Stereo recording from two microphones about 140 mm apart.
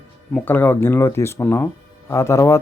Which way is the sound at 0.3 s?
15° left (ahead or behind).